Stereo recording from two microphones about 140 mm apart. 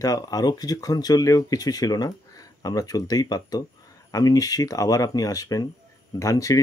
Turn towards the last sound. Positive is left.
turn(degrees=25)  # may be behind; listen again after turning